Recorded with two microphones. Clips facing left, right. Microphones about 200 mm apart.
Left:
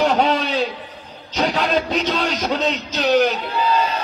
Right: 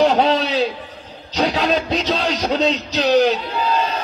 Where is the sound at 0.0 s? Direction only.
35° right (ahead or behind).